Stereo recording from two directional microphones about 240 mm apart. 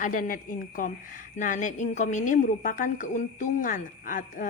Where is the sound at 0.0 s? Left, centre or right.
Left.